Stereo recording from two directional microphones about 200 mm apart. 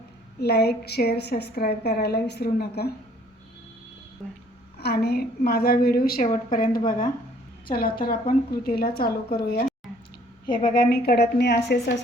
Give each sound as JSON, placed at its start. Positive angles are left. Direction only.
{"t": 0.3, "sound": "a woman's voice", "side_deg": 55}
{"t": 4.8, "sound": "a woman's voice", "side_deg": 55}
{"t": 10.6, "sound": "a woman's voice", "side_deg": 50}